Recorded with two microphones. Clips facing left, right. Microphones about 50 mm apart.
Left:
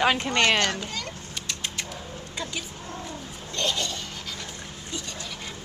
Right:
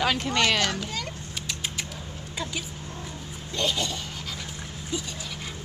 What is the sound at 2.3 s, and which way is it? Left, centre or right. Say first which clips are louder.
Speech: right 1 dB; centre.